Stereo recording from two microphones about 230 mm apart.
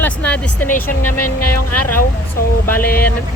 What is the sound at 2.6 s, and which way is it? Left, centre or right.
Speech, centre.